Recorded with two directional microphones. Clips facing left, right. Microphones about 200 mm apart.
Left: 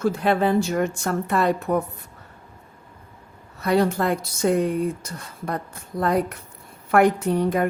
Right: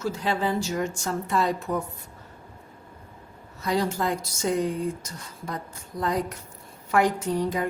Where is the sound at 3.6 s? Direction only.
60° left (ahead or behind).